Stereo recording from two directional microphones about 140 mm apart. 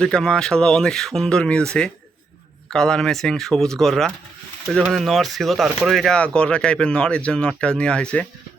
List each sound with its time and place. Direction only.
0.0 s speech: 5° left (ahead or behind)
2.6 s speech: 5° left (ahead or behind)